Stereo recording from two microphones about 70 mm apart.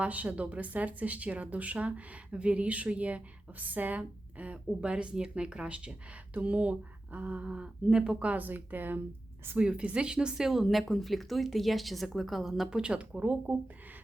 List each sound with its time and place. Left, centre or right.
0.0 s speech: centre
9.6 s speech: centre
12.8 s speech: centre